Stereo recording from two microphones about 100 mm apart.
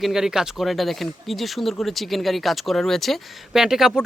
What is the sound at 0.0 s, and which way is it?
Speech, 5° right (ahead or behind).